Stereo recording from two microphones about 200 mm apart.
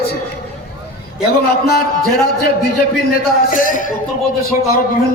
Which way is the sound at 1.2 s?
50° left (ahead or behind).